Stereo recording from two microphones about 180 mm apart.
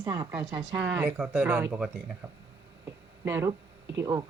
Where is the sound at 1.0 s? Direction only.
5° right (ahead or behind).